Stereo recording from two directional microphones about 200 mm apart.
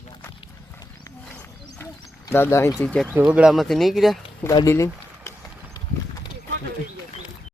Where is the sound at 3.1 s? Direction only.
5° right (ahead or behind).